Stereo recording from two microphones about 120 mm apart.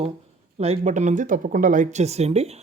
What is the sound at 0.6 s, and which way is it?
Speech, 60° right (ahead or behind).